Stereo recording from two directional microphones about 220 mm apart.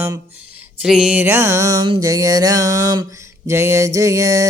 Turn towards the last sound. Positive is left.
turn(degrees=-15)  # may be behind; listen again after turning